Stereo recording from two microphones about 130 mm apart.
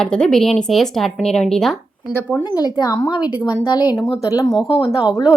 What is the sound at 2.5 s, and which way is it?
A woman's voice, 30° left (ahead or behind).